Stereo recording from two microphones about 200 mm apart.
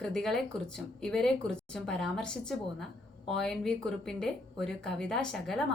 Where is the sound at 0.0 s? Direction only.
5° left (ahead or behind).